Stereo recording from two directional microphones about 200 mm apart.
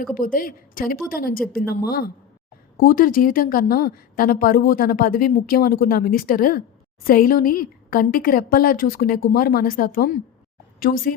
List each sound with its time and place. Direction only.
0.1 s a woman's voice: 45° left (ahead or behind)